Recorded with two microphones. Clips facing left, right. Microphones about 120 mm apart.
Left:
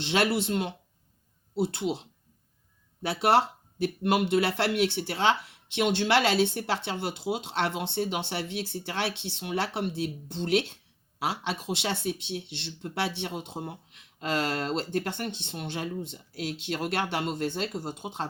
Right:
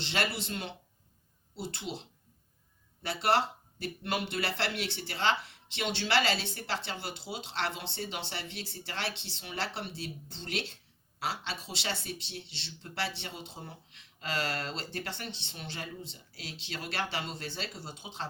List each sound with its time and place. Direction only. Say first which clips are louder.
0.0 s speech: left 8 dB; 55° left (ahead or behind)
3.8 s speech: left 9 dB; 55° left (ahead or behind)